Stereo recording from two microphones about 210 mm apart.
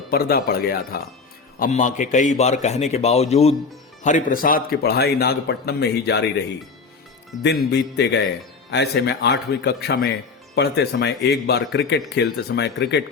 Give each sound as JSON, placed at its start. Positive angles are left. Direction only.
{"t": 0.1, "sound": "a man's voice", "side_deg": 45}
{"t": 7.7, "sound": "a man's voice", "side_deg": 55}